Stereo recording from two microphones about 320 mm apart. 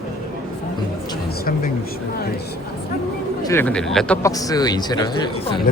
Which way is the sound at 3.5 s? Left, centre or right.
Centre.